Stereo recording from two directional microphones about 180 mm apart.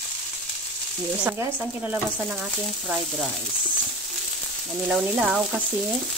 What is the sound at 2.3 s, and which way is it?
Speech, centre (ahead or behind).